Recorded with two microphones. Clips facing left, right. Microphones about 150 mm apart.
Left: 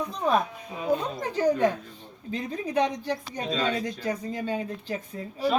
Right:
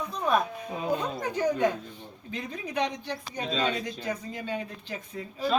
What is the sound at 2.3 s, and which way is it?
Speech, 35° left (ahead or behind).